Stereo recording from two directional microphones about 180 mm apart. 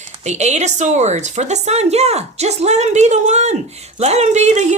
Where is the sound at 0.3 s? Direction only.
40° right (ahead or behind).